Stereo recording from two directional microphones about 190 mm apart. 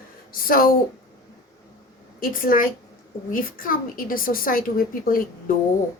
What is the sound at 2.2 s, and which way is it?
A woman's voice, 45° left (ahead or behind).